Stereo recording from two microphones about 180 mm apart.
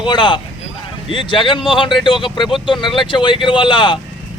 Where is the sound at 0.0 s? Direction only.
25° left (ahead or behind).